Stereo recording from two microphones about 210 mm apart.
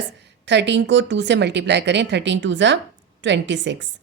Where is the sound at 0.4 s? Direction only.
55° right (ahead or behind).